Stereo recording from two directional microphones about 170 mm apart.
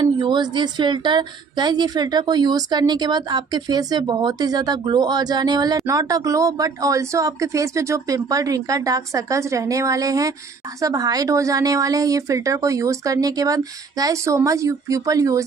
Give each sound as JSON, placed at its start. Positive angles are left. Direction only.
{"t": 0.0, "sound": "a woman's voice", "side_deg": -25}